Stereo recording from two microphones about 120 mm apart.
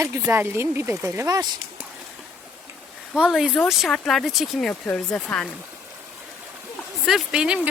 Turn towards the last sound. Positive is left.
turn(degrees=-10)  # may be behind; listen again after turning